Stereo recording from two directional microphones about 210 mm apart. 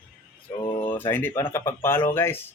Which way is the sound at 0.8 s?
10° left (ahead or behind).